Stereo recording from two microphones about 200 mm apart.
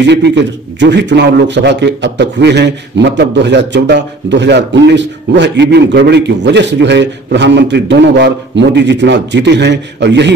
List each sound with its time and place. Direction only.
0.0 s speech: 60° right (ahead or behind)